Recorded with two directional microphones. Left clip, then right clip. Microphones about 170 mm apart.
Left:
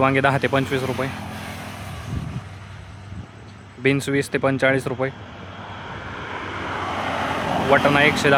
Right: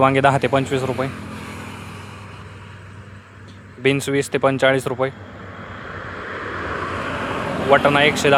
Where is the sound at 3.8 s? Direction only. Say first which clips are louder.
Right 2 dB; 10° right (ahead or behind).